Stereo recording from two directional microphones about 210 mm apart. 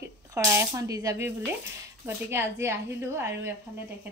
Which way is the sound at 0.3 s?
15° right (ahead or behind).